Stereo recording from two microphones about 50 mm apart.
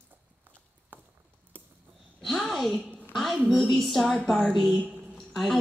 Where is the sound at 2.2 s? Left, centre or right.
Centre.